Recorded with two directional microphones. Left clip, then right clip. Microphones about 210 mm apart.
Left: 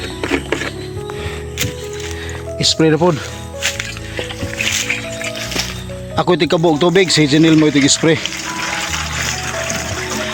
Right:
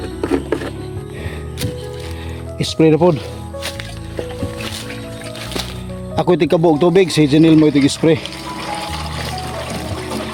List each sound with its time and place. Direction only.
0.2 s music: 25° right (ahead or behind)
2.6 s speech: 5° right (ahead or behind)
4.7 s music: 20° right (ahead or behind)
6.1 s a sound: 10° right (ahead or behind)